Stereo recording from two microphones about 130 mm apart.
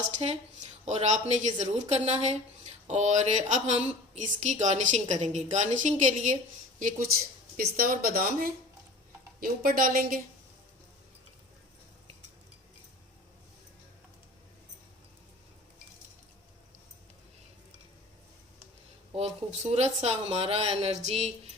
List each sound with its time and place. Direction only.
0.2 s speech: 50° right (ahead or behind)
0.9 s a woman's voice: 65° right (ahead or behind); by 10.2 s 90° right
19.1 s speech: 55° right (ahead or behind)